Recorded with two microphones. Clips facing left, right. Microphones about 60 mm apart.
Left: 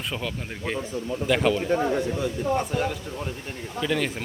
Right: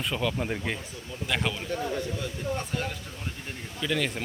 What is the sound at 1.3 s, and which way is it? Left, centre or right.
Speech, centre.